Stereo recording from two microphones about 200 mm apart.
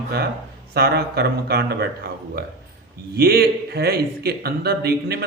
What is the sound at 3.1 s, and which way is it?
Speech, 50° right (ahead or behind).